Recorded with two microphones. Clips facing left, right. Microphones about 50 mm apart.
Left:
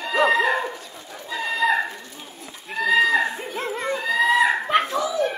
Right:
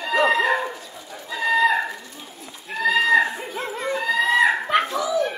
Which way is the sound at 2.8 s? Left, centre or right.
Centre.